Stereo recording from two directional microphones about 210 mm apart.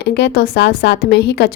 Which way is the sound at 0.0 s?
55° left (ahead or behind).